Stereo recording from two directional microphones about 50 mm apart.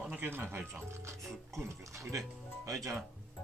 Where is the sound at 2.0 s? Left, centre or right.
Right.